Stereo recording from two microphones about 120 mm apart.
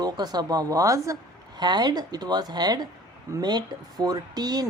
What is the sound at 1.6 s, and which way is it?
Speech, 35° right (ahead or behind).